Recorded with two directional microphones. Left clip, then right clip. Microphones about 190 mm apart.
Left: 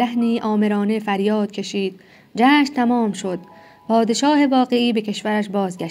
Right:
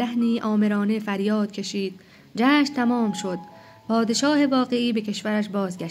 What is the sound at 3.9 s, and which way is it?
Speech, 5° left (ahead or behind).